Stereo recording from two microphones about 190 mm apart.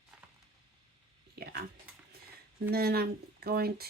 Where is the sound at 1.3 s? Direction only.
55° right (ahead or behind).